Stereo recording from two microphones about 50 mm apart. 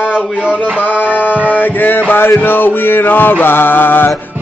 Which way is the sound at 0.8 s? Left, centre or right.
Left.